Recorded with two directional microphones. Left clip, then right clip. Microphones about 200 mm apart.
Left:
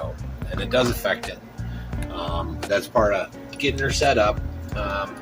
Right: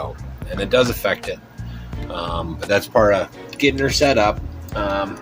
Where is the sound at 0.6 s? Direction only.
40° right (ahead or behind).